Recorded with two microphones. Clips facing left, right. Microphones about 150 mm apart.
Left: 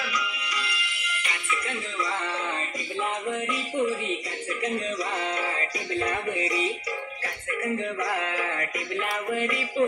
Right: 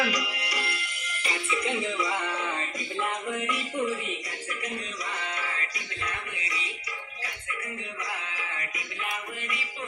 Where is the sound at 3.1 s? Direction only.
25° left (ahead or behind).